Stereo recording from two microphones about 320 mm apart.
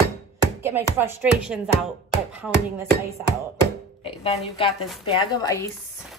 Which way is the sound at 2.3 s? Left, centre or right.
Centre.